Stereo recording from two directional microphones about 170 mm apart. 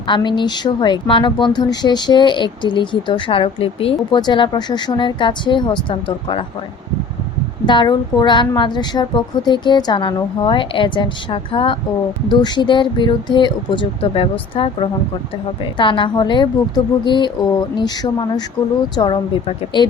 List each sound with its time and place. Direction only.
0.1 s speech: 25° left (ahead or behind)
7.6 s speech: 25° left (ahead or behind)